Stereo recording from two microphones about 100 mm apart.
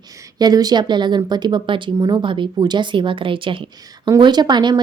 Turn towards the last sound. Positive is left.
turn(degrees=-50)  # may be behind; listen again after turning